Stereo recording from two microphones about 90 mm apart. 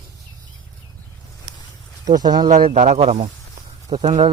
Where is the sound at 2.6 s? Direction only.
90° right.